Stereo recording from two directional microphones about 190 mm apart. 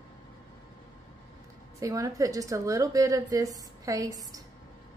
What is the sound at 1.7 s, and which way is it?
A woman's voice, 15° right (ahead or behind).